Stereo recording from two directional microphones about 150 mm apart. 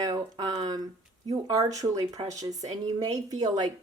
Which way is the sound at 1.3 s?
25° right (ahead or behind).